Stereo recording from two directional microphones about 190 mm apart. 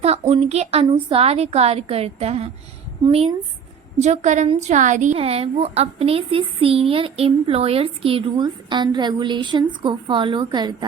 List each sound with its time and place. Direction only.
0.0 s a woman's voice: 35° right (ahead or behind)
4.0 s a woman's voice: 35° right (ahead or behind); by 10.8 s 20° right (ahead or behind)